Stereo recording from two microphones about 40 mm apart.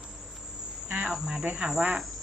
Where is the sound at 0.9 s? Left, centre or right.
Centre.